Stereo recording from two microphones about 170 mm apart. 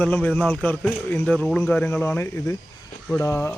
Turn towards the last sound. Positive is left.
turn(degrees=15)  # may be behind; listen again after turning